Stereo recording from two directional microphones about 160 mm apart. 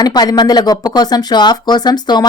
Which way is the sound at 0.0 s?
25° left (ahead or behind).